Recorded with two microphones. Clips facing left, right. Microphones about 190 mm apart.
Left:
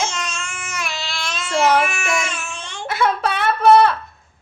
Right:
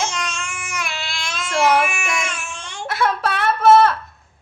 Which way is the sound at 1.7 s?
10° right (ahead or behind).